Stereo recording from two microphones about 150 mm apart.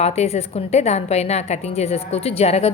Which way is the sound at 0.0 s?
45° left (ahead or behind).